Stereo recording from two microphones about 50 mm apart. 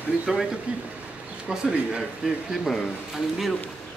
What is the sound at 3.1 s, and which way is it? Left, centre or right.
Speech, centre.